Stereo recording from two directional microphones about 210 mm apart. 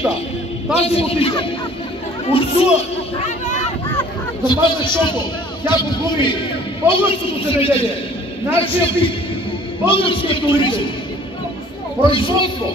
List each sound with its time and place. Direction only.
0.7 s a man's voice: 30° left (ahead or behind)
4.5 s a man's voice: 20° left (ahead or behind)
12.1 s a man's voice: 25° left (ahead or behind)